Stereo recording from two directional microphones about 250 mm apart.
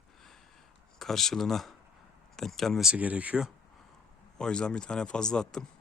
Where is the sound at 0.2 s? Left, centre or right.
Centre.